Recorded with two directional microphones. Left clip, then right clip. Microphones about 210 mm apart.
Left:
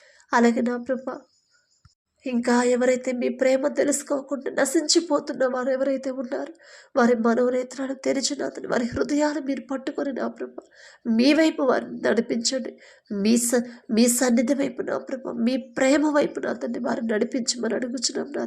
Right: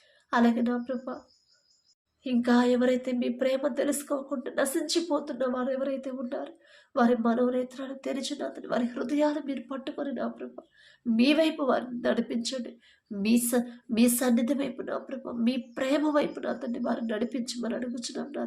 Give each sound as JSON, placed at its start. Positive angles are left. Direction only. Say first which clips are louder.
{"t": 0.3, "sound": "speech", "louder": "left 5 dB", "side_deg": 35}
{"t": 2.4, "sound": "a woman's voice", "louder": "left 4 dB", "side_deg": 25}